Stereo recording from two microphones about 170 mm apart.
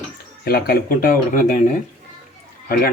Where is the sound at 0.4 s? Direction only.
60° left (ahead or behind).